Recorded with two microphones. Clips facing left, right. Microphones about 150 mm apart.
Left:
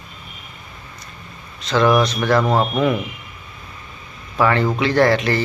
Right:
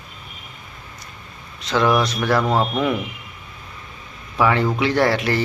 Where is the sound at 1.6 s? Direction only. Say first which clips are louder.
Left 2 dB; 10° right (ahead or behind).